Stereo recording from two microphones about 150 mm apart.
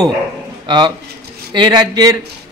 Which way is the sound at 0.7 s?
30° right (ahead or behind).